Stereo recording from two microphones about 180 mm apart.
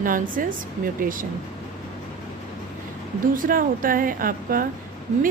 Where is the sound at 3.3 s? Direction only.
50° right (ahead or behind).